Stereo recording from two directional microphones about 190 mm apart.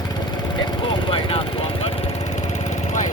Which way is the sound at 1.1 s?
30° left (ahead or behind).